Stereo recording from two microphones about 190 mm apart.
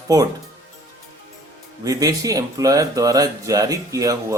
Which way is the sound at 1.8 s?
20° right (ahead or behind).